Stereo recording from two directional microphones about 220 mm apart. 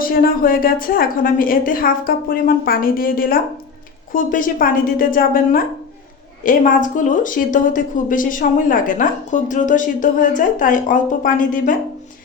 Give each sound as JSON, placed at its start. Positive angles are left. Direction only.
{"t": 0.0, "sound": "a woman's voice", "side_deg": 40}